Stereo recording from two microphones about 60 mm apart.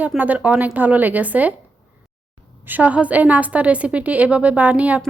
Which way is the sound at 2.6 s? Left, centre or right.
Right.